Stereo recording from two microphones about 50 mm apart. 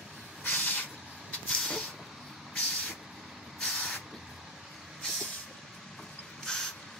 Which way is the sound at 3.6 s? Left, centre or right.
Centre.